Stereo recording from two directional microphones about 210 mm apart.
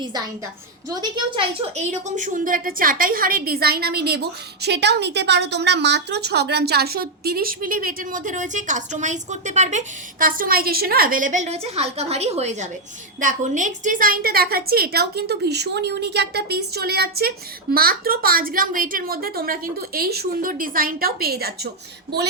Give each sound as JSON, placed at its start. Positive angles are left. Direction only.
{"t": 1.7, "sound": "a woman's voice", "side_deg": -35}